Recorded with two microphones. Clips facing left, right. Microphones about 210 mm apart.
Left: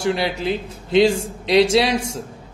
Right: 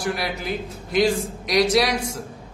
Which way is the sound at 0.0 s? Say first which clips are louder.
Left 5 dB; 25° left (ahead or behind).